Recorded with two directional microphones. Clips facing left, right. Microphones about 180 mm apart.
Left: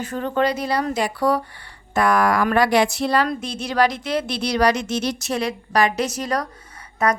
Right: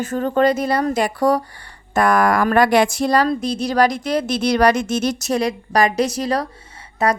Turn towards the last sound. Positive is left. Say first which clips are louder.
# right 2 dB
turn(degrees=-30)  # may be behind; listen again after turning